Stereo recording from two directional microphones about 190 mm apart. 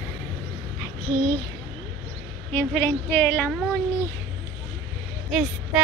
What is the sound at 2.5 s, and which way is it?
Speech, 10° left (ahead or behind).